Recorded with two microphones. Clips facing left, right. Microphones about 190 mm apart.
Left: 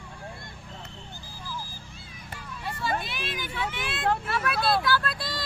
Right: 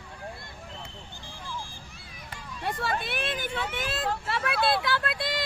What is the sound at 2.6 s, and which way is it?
Vehicle, 60° right (ahead or behind).